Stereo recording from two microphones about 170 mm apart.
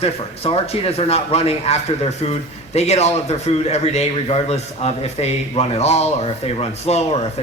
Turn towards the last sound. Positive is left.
turn(degrees=40)  # may be behind; listen again after turning